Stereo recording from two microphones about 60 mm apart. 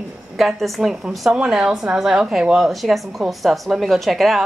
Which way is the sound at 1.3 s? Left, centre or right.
Centre.